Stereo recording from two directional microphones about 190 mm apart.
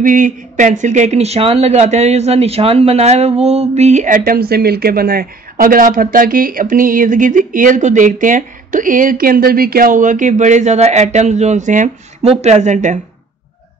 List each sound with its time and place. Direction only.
0.0 s speech: 45° right (ahead or behind)